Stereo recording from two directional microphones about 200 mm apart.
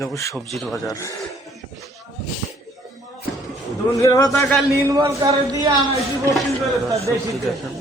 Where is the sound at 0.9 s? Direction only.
15° left (ahead or behind).